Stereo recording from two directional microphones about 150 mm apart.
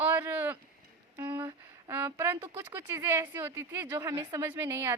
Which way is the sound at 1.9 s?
15° right (ahead or behind).